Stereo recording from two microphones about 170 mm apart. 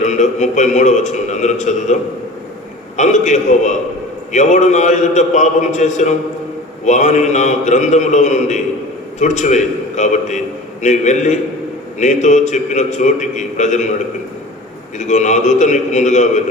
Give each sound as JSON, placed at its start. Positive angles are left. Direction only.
{"t": 0.0, "sound": "a man's voice", "side_deg": 45}
{"t": 3.0, "sound": "a man's voice", "side_deg": 45}
{"t": 14.9, "sound": "a man's voice", "side_deg": 45}